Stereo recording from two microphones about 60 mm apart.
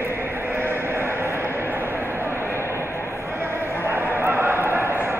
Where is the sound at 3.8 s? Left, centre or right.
Right.